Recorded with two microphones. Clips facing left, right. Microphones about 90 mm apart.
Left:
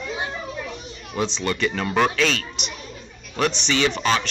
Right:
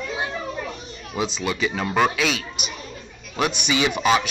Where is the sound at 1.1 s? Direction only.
5° right (ahead or behind).